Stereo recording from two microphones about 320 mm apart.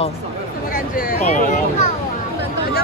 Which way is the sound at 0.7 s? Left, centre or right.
Left.